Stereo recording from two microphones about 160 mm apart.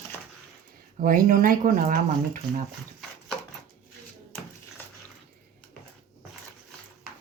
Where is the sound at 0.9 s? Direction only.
55° right (ahead or behind).